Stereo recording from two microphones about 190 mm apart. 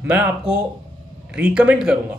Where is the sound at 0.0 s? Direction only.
5° right (ahead or behind).